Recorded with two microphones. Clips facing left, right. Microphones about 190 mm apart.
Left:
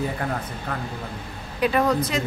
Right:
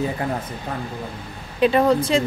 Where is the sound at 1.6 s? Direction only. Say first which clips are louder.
Right 4 dB; 25° right (ahead or behind).